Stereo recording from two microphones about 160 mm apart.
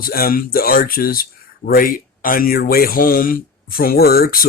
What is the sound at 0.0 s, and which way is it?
Speech, 65° left (ahead or behind).